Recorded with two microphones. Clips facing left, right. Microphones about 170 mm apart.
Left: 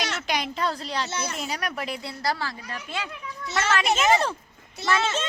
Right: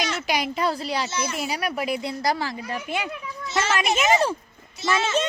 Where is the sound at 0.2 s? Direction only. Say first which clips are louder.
Right 3 dB; 10° right (ahead or behind).